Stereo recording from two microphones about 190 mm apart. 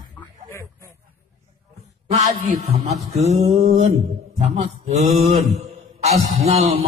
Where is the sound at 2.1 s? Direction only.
35° right (ahead or behind).